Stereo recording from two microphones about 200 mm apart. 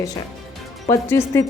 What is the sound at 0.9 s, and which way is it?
Speech, 15° left (ahead or behind).